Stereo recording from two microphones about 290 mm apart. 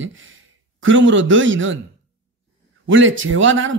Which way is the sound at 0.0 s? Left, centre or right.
Right.